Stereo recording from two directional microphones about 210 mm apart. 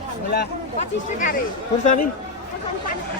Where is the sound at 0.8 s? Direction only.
40° left (ahead or behind).